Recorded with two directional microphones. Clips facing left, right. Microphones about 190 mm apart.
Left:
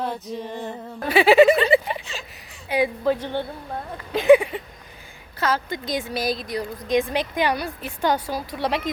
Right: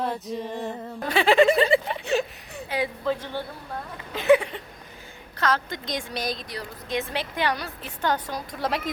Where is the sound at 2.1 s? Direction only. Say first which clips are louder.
Right 13 dB; 65° right (ahead or behind).